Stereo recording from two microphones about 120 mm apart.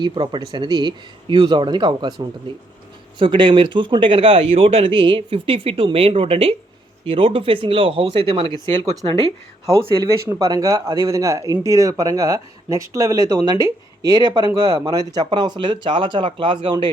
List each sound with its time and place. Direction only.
0.0 s speech: 40° right (ahead or behind)
9.6 s speech: 50° right (ahead or behind)
10.0 s speech: 30° right (ahead or behind)